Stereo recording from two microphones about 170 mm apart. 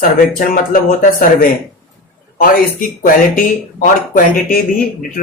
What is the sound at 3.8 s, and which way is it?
Speech, 55° left (ahead or behind).